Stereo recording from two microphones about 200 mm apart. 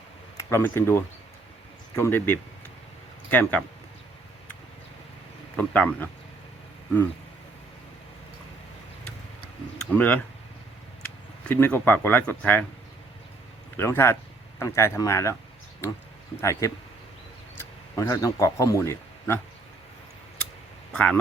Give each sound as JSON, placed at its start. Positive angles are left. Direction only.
{"t": 0.3, "sound": "speech", "side_deg": 10}
{"t": 5.5, "sound": "speech", "side_deg": 5}
{"t": 9.9, "sound": "speech", "side_deg": 5}
{"t": 11.4, "sound": "speech", "side_deg": 10}
{"t": 13.7, "sound": "speech", "side_deg": 10}
{"t": 16.4, "sound": "speech", "side_deg": 15}
{"t": 20.9, "sound": "speech", "side_deg": 5}